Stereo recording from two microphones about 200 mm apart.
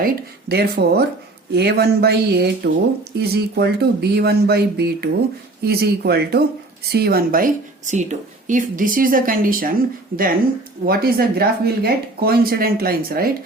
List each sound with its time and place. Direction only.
0.0 s speech: 50° right (ahead or behind)